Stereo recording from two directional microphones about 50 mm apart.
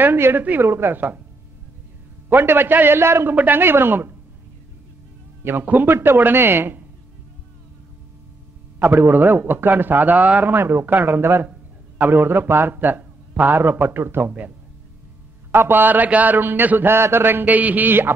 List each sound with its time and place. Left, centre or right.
0.0 s a man's voice: right
0.7 s a man's voice: right
2.2 s a man's voice: right
3.0 s speech: right
3.3 s a man's voice: right
5.4 s a man's voice: right
6.4 s speech: right
8.7 s a man's voice: right
10.5 s a man's voice: right
12.7 s a man's voice: right
15.5 s a man's voice: right
16.9 s a man's voice: right
17.5 s a man's voice: right